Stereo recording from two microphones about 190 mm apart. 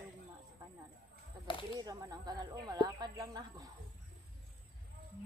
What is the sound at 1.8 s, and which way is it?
Speech, 20° right (ahead or behind).